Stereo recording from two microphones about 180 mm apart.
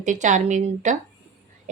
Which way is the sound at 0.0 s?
45° right (ahead or behind).